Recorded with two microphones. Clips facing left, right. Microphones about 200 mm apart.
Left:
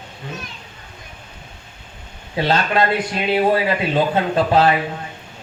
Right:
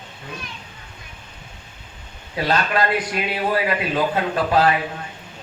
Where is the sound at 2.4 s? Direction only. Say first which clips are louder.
Left 3 dB; 25° left (ahead or behind).